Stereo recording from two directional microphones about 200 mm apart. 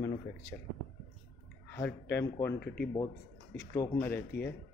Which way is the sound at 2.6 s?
50° left (ahead or behind).